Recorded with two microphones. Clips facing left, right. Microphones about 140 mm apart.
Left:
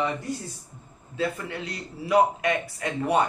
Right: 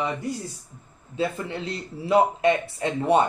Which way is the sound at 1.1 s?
25° right (ahead or behind).